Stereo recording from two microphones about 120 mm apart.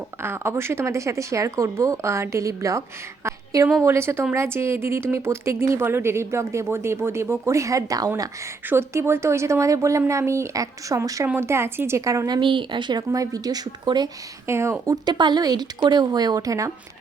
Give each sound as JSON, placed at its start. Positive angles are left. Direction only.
{"t": 0.2, "sound": "a woman's voice", "side_deg": -20}
{"t": 12.4, "sound": "a woman's voice", "side_deg": -45}
{"t": 14.4, "sound": "speech", "side_deg": -25}
{"t": 15.0, "sound": "a woman's voice", "side_deg": -35}